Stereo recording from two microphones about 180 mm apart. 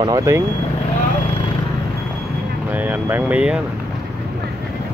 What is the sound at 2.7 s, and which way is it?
Speech, 10° right (ahead or behind).